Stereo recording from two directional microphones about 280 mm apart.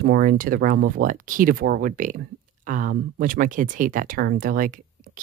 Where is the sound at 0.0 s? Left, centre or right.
Right.